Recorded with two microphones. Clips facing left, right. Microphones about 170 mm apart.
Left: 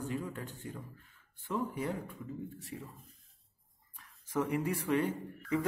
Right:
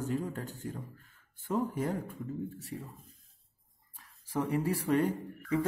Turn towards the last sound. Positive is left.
turn(degrees=-40)  # may be behind; listen again after turning